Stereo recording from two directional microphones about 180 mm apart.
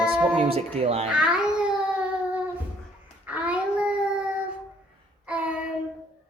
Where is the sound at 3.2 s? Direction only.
5° right (ahead or behind).